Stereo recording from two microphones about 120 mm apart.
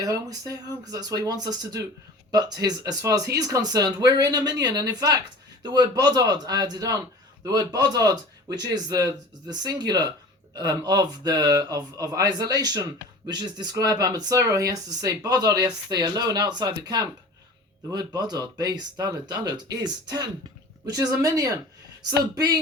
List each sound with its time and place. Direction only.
0.0 s speech: 30° right (ahead or behind)